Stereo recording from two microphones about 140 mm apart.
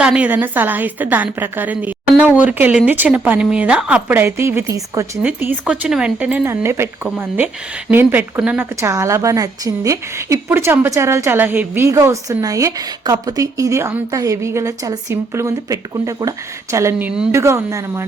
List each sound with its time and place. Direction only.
0.0 s a woman's voice: 10° right (ahead or behind)
5.2 s speech: 10° right (ahead or behind)